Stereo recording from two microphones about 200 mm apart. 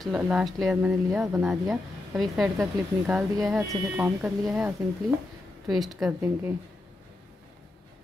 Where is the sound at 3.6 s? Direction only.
15° right (ahead or behind).